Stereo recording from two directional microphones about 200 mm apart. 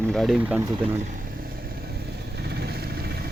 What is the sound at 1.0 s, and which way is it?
Vehicle, 50° right (ahead or behind).